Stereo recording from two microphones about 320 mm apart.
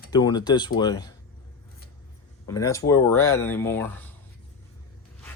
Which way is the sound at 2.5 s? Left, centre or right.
Centre.